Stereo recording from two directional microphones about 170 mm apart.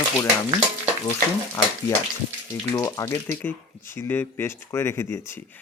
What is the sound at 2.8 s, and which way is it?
Speech, 20° left (ahead or behind).